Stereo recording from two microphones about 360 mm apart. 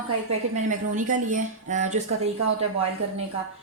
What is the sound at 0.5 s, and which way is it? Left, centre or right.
Speech, right.